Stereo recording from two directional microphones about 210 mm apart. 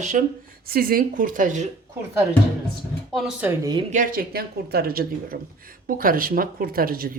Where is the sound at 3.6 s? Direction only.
20° right (ahead or behind).